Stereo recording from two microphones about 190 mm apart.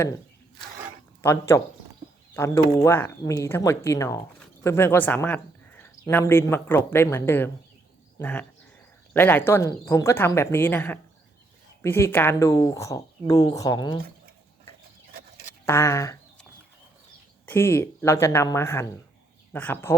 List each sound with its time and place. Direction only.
1.2 s speech: 15° left (ahead or behind)
15.6 s speech: 15° left (ahead or behind)
17.4 s speech: 10° left (ahead or behind)